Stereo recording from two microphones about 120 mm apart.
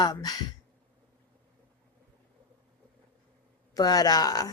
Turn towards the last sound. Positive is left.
turn(degrees=35)  # may be behind; listen again after turning